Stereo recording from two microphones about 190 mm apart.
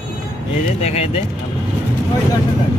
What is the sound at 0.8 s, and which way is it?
Speech, 35° left (ahead or behind).